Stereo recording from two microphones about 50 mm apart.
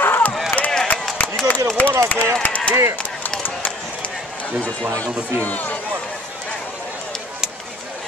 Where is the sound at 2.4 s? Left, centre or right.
Left.